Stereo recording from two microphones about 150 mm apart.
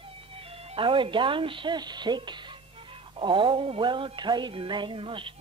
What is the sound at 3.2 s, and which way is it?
Music, 35° right (ahead or behind).